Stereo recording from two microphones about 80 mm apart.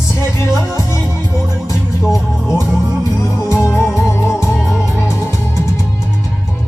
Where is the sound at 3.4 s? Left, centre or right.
Left.